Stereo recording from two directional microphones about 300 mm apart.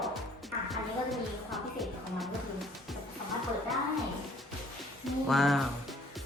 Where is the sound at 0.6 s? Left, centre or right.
Centre.